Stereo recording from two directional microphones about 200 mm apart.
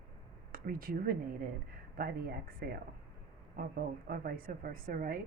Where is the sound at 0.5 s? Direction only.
45° right (ahead or behind).